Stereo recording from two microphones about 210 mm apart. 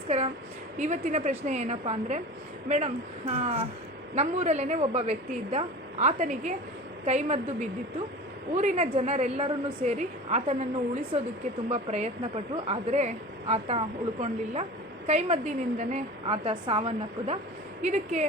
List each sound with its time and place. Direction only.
0.8 s a woman's voice: 35° right (ahead or behind)